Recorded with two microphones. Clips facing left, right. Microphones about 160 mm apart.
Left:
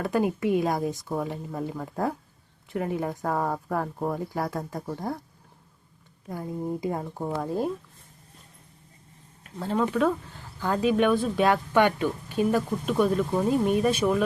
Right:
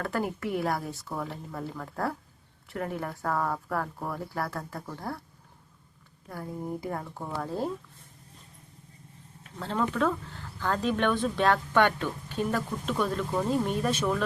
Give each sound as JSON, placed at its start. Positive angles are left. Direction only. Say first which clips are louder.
{"t": 0.0, "sound": "speech", "louder": "left 6 dB", "side_deg": 15}
{"t": 6.2, "sound": "speech", "louder": "left 4 dB", "side_deg": 20}
{"t": 9.6, "sound": "speech", "louder": "left 4 dB", "side_deg": 10}